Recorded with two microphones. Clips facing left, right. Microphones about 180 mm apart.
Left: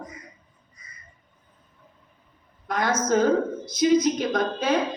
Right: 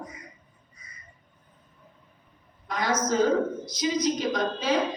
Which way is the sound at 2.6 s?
55° left (ahead or behind).